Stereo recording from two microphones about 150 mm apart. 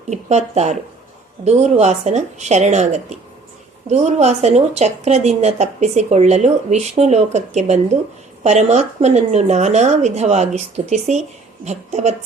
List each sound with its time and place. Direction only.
0.1 s a woman's voice: 50° right (ahead or behind)